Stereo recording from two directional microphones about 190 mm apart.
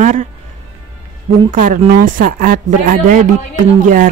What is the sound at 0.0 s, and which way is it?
Speech, 40° right (ahead or behind).